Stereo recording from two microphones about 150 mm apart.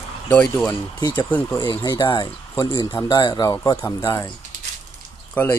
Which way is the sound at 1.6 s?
30° left (ahead or behind).